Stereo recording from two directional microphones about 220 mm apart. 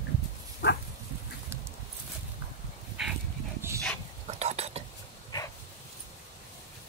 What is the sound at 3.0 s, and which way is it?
Dog, centre (ahead or behind).